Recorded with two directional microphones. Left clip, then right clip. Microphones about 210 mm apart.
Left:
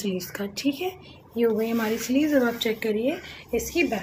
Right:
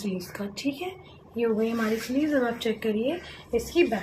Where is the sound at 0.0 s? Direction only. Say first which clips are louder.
Left 4 dB; 30° left (ahead or behind).